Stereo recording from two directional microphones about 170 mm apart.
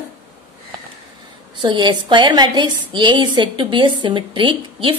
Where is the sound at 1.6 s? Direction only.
25° right (ahead or behind).